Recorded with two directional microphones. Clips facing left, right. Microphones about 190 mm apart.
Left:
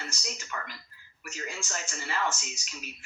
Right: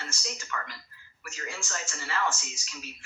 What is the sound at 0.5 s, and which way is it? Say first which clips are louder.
Speech: right 2 dB; 25° left (ahead or behind).